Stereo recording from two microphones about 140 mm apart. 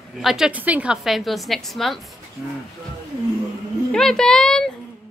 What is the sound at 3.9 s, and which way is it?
Speech, 5° left (ahead or behind).